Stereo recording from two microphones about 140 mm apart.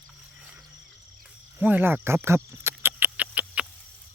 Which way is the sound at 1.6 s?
15° right (ahead or behind).